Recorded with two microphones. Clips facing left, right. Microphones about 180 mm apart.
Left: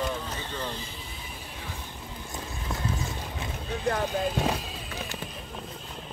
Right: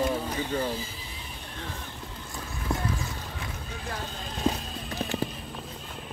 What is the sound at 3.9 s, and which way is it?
Speech, 65° left (ahead or behind).